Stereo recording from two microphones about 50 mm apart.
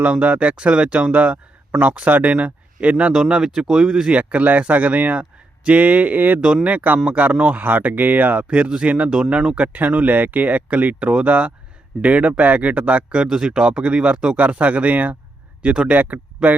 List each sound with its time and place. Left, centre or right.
0.0 s speech: right
3.2 s speech: centre
4.1 s speech: right
6.4 s speech: centre
6.7 s speech: right
8.4 s speech: right
13.2 s speech: centre; by 16.6 s right